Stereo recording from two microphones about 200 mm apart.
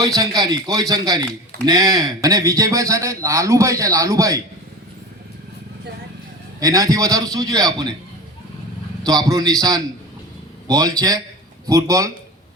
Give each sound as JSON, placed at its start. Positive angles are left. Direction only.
{"t": 0.0, "sound": "a man's voice", "side_deg": -20}
{"t": 6.6, "sound": "a man's voice", "side_deg": -20}
{"t": 9.0, "sound": "a man's voice", "side_deg": -20}